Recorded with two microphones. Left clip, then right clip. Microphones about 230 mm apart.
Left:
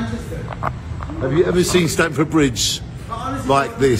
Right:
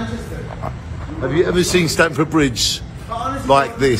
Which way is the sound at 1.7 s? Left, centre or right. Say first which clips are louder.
Right 2 dB; centre.